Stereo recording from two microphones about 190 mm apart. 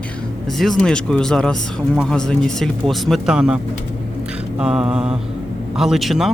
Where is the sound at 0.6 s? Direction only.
5° left (ahead or behind).